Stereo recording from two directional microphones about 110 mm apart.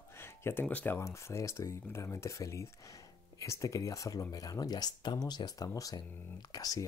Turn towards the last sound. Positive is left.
turn(degrees=35)  # may be behind; listen again after turning